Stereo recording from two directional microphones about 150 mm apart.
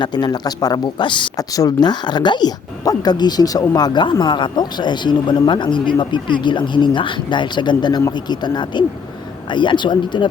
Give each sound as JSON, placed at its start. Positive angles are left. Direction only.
{"t": 0.0, "sound": "speech", "side_deg": 30}